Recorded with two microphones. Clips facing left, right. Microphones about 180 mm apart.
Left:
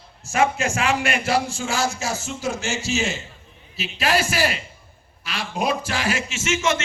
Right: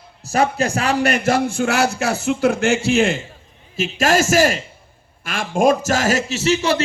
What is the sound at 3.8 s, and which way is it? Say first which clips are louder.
A man's voice: right 6 dB; 45° right (ahead or behind).